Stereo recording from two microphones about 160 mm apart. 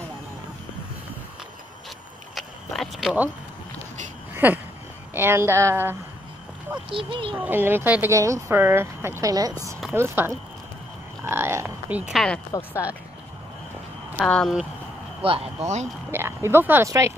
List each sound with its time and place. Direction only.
2.3 s a sound: centre (ahead or behind)
4.3 s a sound: 10° right (ahead or behind)
5.1 s speech: 15° right (ahead or behind)
6.9 s speech: 35° right (ahead or behind)
7.3 s speech: 10° right (ahead or behind)
12.2 s speech: 5° left (ahead or behind)
14.1 s speech: 5° left (ahead or behind)
15.2 s speech: 35° right (ahead or behind)
16.1 s speech: 15° right (ahead or behind)